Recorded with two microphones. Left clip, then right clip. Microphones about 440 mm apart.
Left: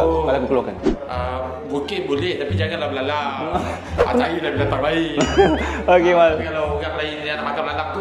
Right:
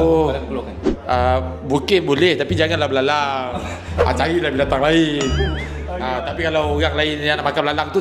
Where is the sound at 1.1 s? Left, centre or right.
Right.